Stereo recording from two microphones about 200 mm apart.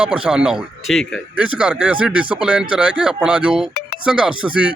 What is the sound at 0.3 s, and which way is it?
Speech, 5° right (ahead or behind).